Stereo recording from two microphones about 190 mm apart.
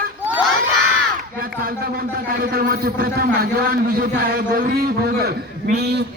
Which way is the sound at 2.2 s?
50° right (ahead or behind).